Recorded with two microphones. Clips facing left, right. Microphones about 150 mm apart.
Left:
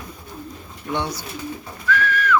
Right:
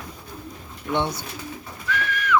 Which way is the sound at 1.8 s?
20° right (ahead or behind).